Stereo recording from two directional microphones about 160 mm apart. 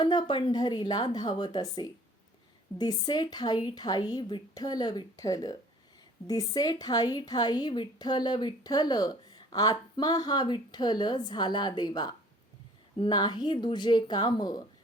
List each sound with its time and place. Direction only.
0.0 s a woman's voice: 30° left (ahead or behind)